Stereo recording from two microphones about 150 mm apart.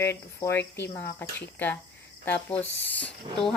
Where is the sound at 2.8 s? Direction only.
10° left (ahead or behind).